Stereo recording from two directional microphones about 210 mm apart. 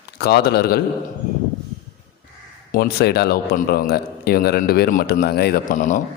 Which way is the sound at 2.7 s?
45° left (ahead or behind).